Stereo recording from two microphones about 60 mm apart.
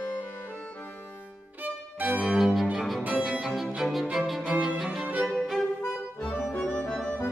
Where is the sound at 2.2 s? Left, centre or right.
Centre.